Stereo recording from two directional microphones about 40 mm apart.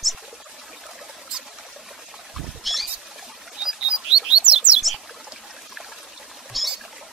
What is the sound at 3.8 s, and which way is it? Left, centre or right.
Chirp, centre.